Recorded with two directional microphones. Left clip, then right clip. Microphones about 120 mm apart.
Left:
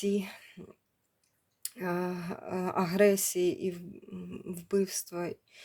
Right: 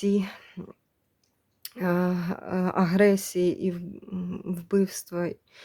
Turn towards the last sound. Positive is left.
turn(degrees=-55)  # may be behind; listen again after turning